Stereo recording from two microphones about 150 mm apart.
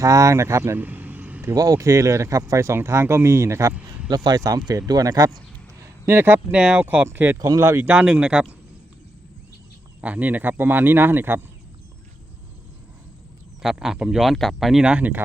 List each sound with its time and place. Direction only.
0.0 s speech: 20° right (ahead or behind)
7.3 s speech: 25° right (ahead or behind); by 8.4 s 5° right (ahead or behind)
10.0 s speech: 10° right (ahead or behind)
13.6 s speech: 5° right (ahead or behind)